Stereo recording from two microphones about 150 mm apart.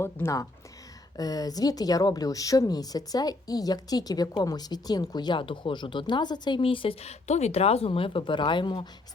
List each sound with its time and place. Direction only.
0.0 s a woman's voice: 20° left (ahead or behind)